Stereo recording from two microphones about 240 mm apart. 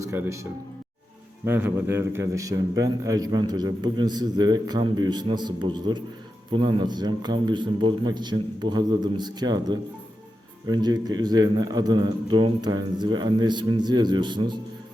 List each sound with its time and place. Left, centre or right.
0.0 s a man's voice: centre
1.5 s a man's voice: centre